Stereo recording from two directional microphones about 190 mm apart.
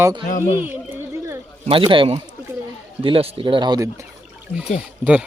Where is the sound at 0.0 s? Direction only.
20° right (ahead or behind).